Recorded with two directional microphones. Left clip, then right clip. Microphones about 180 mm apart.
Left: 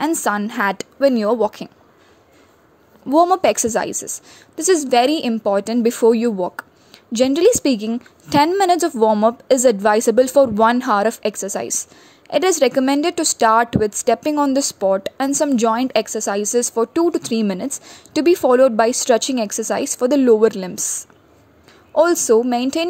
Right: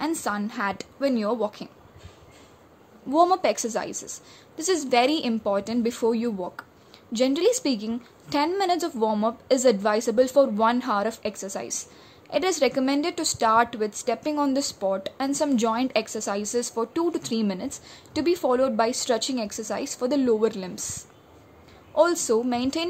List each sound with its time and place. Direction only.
0.0 s a woman's voice: 45° left (ahead or behind)
3.1 s a woman's voice: 40° left (ahead or behind)